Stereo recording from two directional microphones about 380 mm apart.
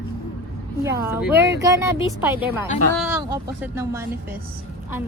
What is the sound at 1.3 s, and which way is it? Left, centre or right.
Speech, right.